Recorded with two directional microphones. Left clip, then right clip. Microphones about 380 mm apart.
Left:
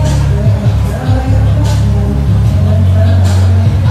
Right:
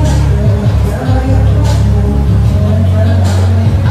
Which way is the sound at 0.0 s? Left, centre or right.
Centre.